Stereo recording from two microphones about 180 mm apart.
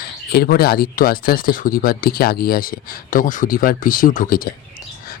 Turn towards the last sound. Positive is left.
turn(degrees=50)  # may be behind; listen again after turning